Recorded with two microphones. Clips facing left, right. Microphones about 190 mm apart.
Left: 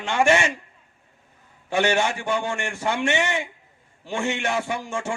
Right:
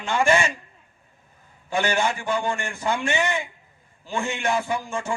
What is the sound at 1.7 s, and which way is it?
A man's voice, 70° left (ahead or behind).